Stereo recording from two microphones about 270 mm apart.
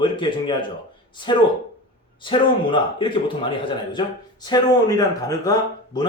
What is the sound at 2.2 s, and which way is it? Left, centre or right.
Speech, centre.